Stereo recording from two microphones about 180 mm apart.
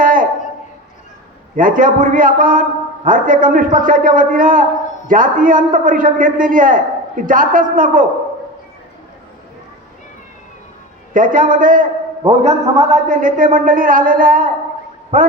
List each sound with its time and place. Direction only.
0.0 s a sound: 50° right (ahead or behind)
1.5 s a man's voice: 50° right (ahead or behind)
11.1 s a man's voice: 50° right (ahead or behind)